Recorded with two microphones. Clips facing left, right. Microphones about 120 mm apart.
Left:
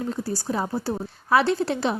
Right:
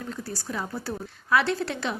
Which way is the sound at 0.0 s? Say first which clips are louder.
Left 7 dB; 30° left (ahead or behind).